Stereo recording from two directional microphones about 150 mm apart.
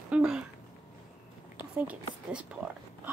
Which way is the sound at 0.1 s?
5° right (ahead or behind).